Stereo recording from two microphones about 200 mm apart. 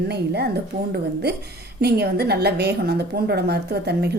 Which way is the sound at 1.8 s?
55° right (ahead or behind).